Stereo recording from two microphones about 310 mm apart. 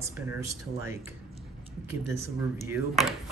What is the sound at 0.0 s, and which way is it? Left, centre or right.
Speech, centre.